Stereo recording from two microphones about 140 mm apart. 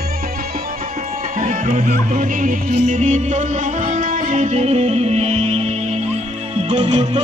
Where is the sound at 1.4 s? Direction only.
55° right (ahead or behind).